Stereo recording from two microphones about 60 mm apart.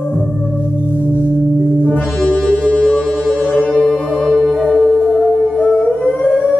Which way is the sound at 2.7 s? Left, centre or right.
Left.